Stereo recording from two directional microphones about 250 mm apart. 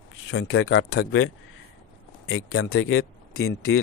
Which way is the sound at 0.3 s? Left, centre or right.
Left.